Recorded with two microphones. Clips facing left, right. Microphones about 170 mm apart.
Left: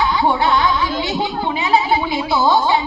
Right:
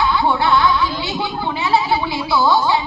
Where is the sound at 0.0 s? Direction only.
15° left (ahead or behind).